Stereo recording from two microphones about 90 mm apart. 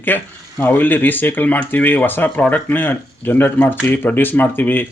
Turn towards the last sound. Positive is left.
turn(degrees=20)  # may be behind; listen again after turning